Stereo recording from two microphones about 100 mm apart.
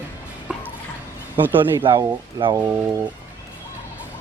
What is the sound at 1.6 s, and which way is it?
Speech, 60° right (ahead or behind).